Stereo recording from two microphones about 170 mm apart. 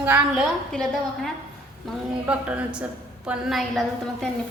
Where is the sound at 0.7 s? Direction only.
Centre (ahead or behind).